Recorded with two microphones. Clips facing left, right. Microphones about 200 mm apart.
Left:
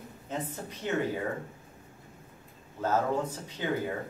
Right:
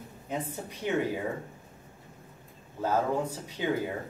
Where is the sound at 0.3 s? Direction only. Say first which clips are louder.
Right 1 dB; 10° right (ahead or behind).